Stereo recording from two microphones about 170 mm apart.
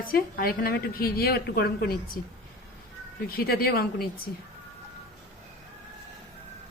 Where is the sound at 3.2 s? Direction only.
60° left (ahead or behind).